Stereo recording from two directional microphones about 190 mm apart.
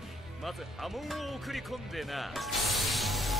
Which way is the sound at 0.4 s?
Centre (ahead or behind).